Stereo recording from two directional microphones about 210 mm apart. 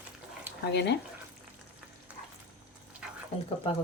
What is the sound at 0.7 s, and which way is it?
Speech, 55° left (ahead or behind).